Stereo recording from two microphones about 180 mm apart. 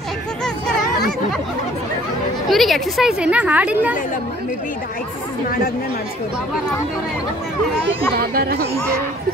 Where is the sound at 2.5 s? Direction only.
Centre (ahead or behind).